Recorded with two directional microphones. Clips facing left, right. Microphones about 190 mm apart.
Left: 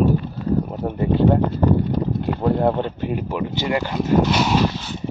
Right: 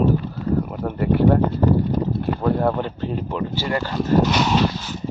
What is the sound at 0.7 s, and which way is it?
Speech, 20° left (ahead or behind).